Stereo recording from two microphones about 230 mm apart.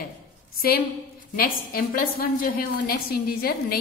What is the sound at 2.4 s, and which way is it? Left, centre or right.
A woman's voice, left.